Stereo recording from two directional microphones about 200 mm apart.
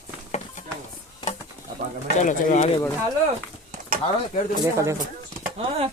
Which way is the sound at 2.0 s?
40° left (ahead or behind).